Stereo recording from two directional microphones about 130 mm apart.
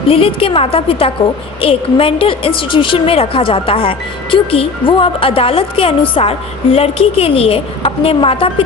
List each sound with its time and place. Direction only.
0.1 s a woman's voice: 45° left (ahead or behind)